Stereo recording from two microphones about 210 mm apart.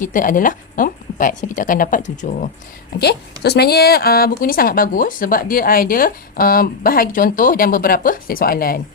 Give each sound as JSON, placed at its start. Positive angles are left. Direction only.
{"t": 0.0, "sound": "speech", "side_deg": 40}
{"t": 3.0, "sound": "a woman's voice", "side_deg": 50}